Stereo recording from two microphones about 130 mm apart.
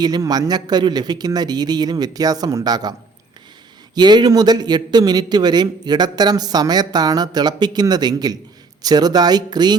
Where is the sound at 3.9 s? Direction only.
35° right (ahead or behind).